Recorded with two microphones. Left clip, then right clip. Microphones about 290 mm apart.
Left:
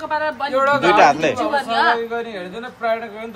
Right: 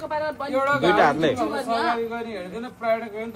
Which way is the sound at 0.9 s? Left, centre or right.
Centre.